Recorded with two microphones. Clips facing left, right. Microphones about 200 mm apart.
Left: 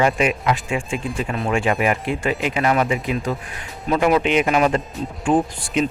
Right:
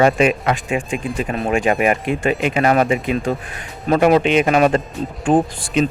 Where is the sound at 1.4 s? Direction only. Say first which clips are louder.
Right 3 dB; 20° right (ahead or behind).